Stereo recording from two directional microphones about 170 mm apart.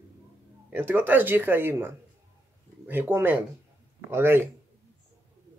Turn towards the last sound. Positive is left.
turn(degrees=-15)  # may be behind; listen again after turning